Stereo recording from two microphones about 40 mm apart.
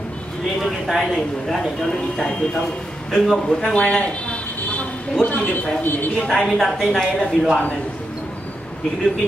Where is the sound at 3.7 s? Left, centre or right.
Left.